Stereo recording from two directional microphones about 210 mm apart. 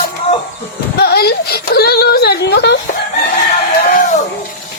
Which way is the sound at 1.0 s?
50° left (ahead or behind).